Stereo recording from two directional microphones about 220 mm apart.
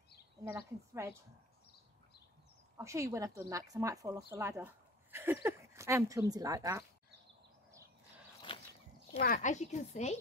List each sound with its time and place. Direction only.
0.5 s speech: 15° right (ahead or behind)
2.8 s speech: 15° right (ahead or behind)
8.5 s a sound: 20° left (ahead or behind)
9.2 s speech: 35° left (ahead or behind)